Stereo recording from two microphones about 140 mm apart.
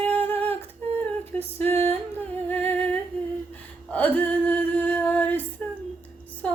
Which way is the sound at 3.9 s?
10° left (ahead or behind).